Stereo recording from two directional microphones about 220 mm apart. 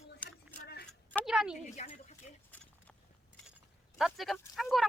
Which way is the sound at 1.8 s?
30° left (ahead or behind).